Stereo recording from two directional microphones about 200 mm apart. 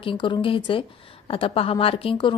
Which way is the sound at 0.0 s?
25° left (ahead or behind).